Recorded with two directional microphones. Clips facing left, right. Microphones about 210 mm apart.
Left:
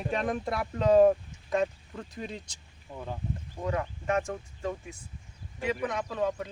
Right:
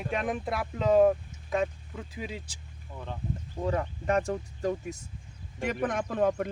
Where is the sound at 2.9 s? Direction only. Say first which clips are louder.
Left 2 dB; 5° left (ahead or behind).